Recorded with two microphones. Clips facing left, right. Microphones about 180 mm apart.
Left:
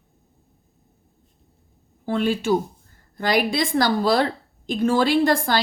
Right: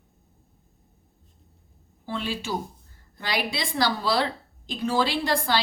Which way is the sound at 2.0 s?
50° left (ahead or behind).